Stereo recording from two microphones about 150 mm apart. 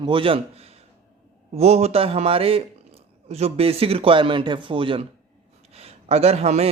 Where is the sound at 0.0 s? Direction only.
35° right (ahead or behind).